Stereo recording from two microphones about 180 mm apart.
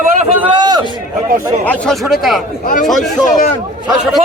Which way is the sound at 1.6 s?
10° left (ahead or behind).